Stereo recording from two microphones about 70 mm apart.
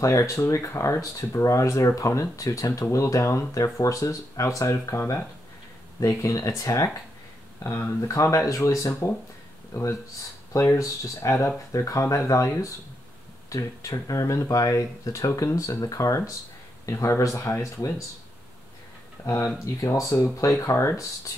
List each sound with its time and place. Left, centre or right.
0.0 s speech: left
5.9 s speech: left
7.6 s speech: left
19.2 s speech: left